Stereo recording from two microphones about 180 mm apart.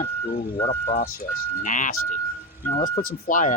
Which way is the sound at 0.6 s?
35° left (ahead or behind).